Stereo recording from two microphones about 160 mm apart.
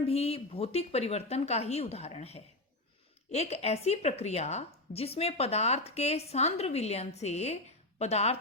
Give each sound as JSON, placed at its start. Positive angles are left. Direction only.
{"t": 0.0, "sound": "a woman's voice", "side_deg": 35}